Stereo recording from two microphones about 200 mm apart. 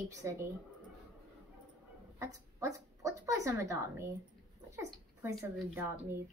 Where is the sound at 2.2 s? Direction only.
15° right (ahead or behind).